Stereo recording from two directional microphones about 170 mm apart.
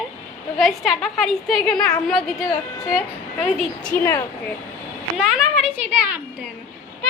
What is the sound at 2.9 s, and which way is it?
A woman's voice, centre (ahead or behind).